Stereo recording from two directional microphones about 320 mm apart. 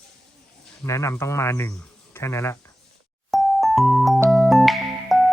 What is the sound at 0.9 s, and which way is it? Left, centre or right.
Speech, centre.